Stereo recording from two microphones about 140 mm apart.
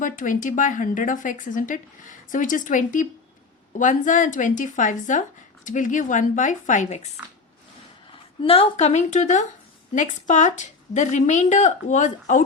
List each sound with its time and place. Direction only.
0.0 s a woman's voice: 70° left (ahead or behind)
8.4 s a woman's voice: 45° left (ahead or behind); by 12.5 s 60° left (ahead or behind)